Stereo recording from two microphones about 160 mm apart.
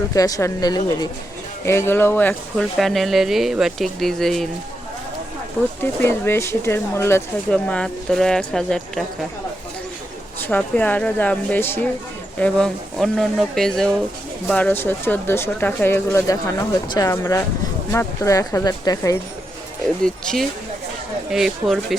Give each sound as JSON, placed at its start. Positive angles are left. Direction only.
{"t": 0.1, "sound": "speech", "side_deg": 20}
{"t": 2.7, "sound": "speech", "side_deg": 0}
{"t": 5.8, "sound": "speech", "side_deg": 15}
{"t": 10.4, "sound": "speech", "side_deg": 10}
{"t": 21.2, "sound": "speech", "side_deg": -5}